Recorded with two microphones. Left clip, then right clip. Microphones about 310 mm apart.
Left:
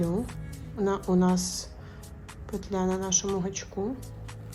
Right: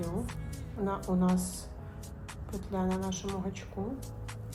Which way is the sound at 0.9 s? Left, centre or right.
Left.